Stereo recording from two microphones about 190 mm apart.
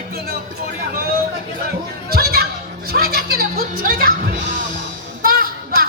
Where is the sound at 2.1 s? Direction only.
55° right (ahead or behind).